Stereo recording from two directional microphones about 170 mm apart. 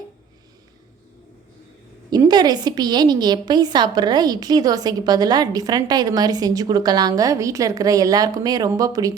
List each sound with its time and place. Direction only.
2.0 s a woman's voice: 25° right (ahead or behind)